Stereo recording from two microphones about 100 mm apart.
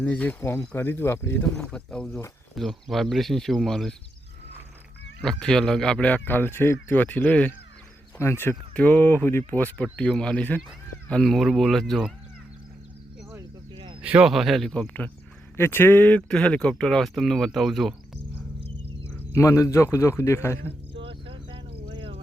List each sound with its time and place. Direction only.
0.0 s speech: 15° left (ahead or behind)
1.5 s speech: 5° left (ahead or behind)
5.2 s speech: 5° left (ahead or behind)
8.2 s speech: 25° left (ahead or behind)
8.7 s speech: 15° left (ahead or behind)
11.1 s speech: 5° left (ahead or behind)
14.0 s speech: 15° right (ahead or behind)
14.3 s speech: centre (ahead or behind)
14.7 s speech: 15° left (ahead or behind)
19.1 s speech: 30° left (ahead or behind)
20.9 s vehicle: 65° right (ahead or behind)
21.8 s music: 50° right (ahead or behind)